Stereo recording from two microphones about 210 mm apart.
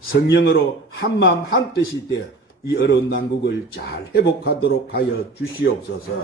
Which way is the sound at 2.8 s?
55° left (ahead or behind).